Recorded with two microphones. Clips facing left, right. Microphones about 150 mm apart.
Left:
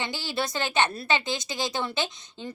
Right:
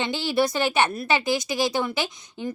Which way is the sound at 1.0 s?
20° left (ahead or behind).